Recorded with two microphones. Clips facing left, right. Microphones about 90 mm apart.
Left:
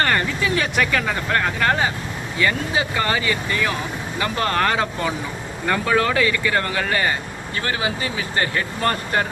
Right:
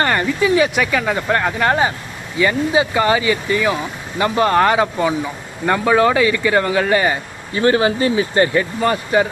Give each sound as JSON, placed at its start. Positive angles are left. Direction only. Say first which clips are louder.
{"t": 0.0, "sound": "vehicle", "louder": "right 4 dB", "side_deg": -20}
{"t": 0.6, "sound": "speech", "louder": "right 4 dB", "side_deg": -10}
{"t": 7.7, "sound": "speech", "louder": "right 10 dB", "side_deg": -35}
{"t": 8.8, "sound": "speech", "louder": "right 4 dB", "side_deg": -10}